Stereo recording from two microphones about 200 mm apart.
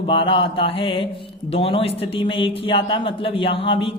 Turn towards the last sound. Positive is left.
turn(degrees=25)  # may be behind; listen again after turning